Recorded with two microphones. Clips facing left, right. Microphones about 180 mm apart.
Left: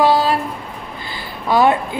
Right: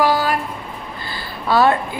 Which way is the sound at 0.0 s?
25° left (ahead or behind).